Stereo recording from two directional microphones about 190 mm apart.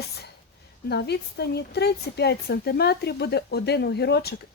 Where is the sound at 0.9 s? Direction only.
60° left (ahead or behind).